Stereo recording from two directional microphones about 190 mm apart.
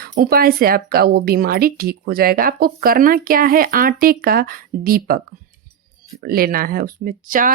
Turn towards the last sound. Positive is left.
turn(degrees=-45)  # may be behind; listen again after turning